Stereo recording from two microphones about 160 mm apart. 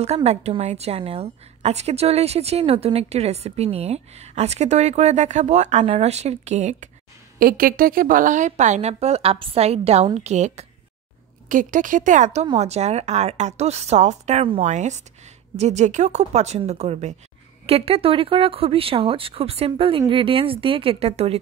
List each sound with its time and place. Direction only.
0.0 s a woman's voice: 40° right (ahead or behind)
7.3 s a woman's voice: 65° right (ahead or behind); by 10.7 s 45° right (ahead or behind)
11.4 s a woman's voice: 55° right (ahead or behind); by 21.4 s 40° right (ahead or behind)